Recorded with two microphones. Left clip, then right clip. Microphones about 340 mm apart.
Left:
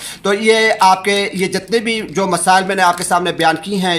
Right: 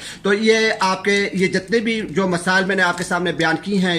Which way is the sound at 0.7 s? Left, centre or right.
Left.